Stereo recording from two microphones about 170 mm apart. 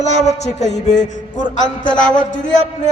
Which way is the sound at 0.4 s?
40° left (ahead or behind).